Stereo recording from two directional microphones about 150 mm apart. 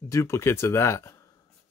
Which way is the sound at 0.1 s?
20° left (ahead or behind).